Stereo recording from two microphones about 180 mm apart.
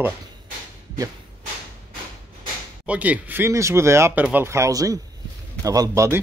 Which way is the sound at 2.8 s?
10° right (ahead or behind).